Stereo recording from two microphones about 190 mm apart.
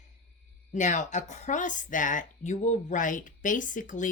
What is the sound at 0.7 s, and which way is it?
Speech, 40° left (ahead or behind).